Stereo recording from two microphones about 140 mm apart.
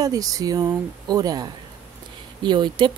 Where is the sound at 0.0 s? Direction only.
25° right (ahead or behind).